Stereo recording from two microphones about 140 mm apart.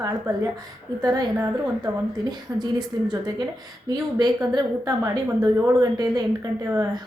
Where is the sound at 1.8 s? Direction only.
30° right (ahead or behind).